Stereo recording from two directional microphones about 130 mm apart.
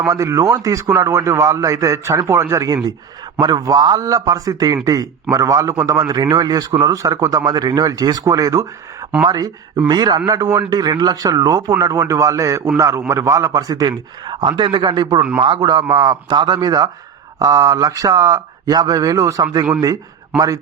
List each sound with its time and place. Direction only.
0.0 s a man's voice: 25° right (ahead or behind)